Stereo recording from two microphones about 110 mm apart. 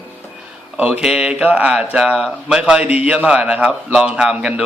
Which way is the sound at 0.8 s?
5° right (ahead or behind).